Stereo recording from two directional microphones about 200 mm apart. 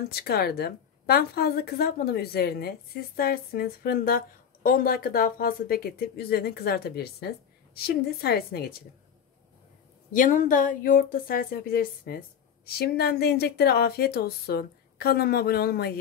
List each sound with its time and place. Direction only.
0.1 s a woman's voice: 50° left (ahead or behind)
10.1 s a woman's voice: 40° left (ahead or behind)